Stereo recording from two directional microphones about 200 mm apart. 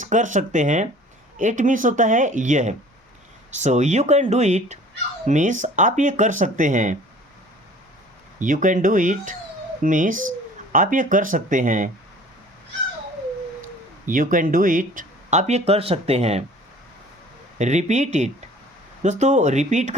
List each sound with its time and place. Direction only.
0.0 s speech: 40° right (ahead or behind)
8.4 s speech: 40° right (ahead or behind)
14.0 s speech: 40° right (ahead or behind)
17.6 s speech: 35° right (ahead or behind)